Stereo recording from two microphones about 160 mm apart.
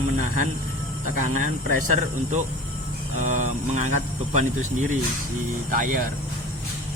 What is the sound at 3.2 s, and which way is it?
Speech, 50° right (ahead or behind).